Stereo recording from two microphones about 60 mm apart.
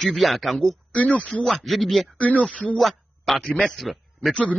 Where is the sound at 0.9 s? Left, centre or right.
Left.